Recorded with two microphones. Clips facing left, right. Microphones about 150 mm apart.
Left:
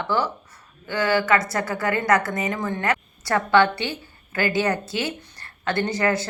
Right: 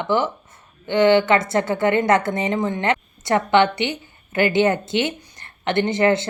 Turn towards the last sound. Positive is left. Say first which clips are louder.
# right 5 dB
turn(degrees=-25)  # may be behind; listen again after turning